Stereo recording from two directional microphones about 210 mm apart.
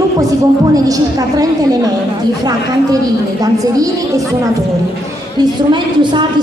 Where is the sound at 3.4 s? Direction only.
15° right (ahead or behind).